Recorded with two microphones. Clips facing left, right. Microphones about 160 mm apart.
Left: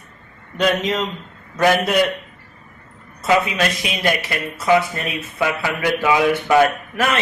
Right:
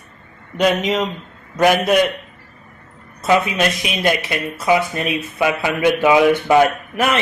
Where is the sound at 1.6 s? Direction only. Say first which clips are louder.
Right 2 dB; 15° right (ahead or behind).